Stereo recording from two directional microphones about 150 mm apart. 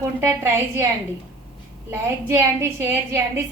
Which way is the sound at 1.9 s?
15° right (ahead or behind).